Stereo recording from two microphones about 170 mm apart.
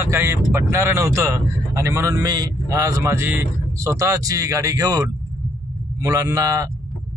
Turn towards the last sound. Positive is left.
turn(degrees=-20)  # may be behind; listen again after turning